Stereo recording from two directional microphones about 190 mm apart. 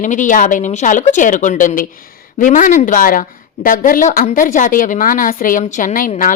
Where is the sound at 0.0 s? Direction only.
40° left (ahead or behind).